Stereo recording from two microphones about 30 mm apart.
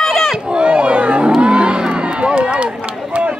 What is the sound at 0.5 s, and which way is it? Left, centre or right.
Roaring cats, right.